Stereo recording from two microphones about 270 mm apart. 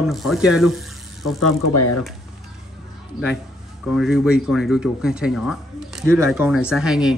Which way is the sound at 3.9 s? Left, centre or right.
Centre.